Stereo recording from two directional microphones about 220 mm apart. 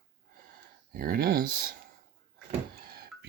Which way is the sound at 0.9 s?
40° right (ahead or behind).